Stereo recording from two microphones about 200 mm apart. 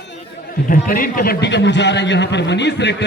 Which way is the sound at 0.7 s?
45° left (ahead or behind).